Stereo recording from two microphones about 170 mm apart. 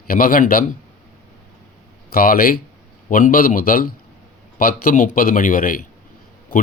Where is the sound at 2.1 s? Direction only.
60° left (ahead or behind).